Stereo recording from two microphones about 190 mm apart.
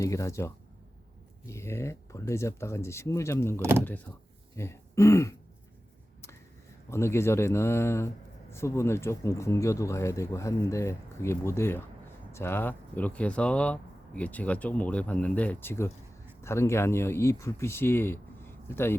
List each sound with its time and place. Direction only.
0.0 s speech: 15° left (ahead or behind)
3.6 s speech: 10° right (ahead or behind)
4.1 s speech: 10° left (ahead or behind)
6.9 s speech: 15° left (ahead or behind)